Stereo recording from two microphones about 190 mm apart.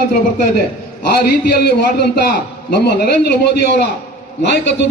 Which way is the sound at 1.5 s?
60° left (ahead or behind).